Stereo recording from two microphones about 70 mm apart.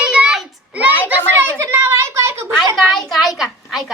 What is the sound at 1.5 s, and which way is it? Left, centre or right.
Speech, right.